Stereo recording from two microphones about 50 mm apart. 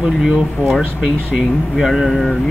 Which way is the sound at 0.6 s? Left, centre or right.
Right.